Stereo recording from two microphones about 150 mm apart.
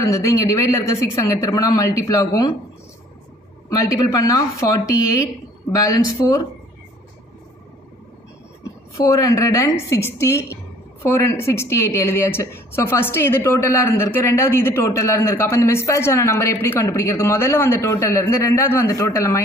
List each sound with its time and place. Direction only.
0.0 s speech: 20° left (ahead or behind)
3.6 s speech: 20° left (ahead or behind)
8.9 s a woman's voice: 20° left (ahead or behind)